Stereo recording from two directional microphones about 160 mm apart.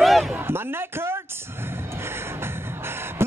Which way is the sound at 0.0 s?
Centre (ahead or behind).